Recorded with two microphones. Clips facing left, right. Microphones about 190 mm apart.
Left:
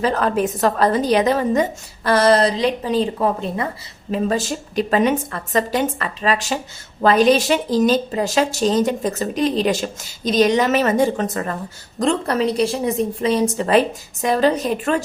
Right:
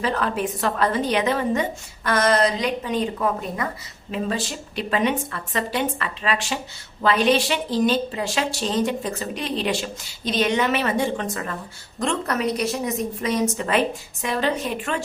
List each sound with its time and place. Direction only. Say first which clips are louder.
0.0 s a woman's voice: left 5 dB; 40° left (ahead or behind)
4.1 s a woman's voice: left 6 dB; 45° left (ahead or behind)